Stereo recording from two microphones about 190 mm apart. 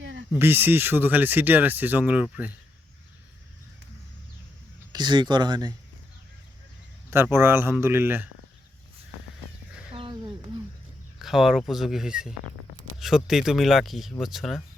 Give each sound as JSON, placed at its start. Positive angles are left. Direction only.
{"t": 0.0, "sound": "a sound", "side_deg": -75}
{"t": 0.3, "sound": "speech", "side_deg": -10}
{"t": 4.9, "sound": "speech", "side_deg": -20}
{"t": 7.1, "sound": "speech", "side_deg": -10}
{"t": 9.9, "sound": "a sound", "side_deg": -25}
{"t": 11.2, "sound": "speech", "side_deg": 0}